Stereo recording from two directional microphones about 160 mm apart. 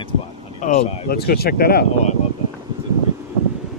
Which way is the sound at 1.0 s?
75° left (ahead or behind).